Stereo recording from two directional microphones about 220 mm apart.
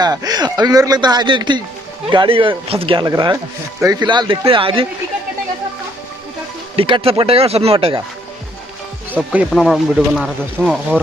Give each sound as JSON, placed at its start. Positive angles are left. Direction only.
{"t": 0.0, "sound": "speech", "side_deg": -15}
{"t": 6.8, "sound": "speech", "side_deg": -25}
{"t": 9.3, "sound": "speech", "side_deg": 0}